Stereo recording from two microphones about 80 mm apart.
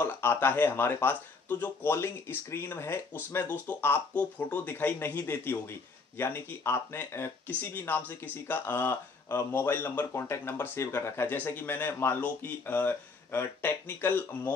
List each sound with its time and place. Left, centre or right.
0.0 s speech: left